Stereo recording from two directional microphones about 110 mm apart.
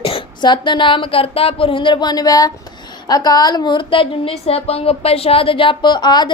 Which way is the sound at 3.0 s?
35° left (ahead or behind).